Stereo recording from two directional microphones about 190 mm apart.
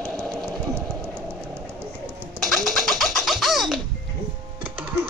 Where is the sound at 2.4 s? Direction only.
Centre (ahead or behind).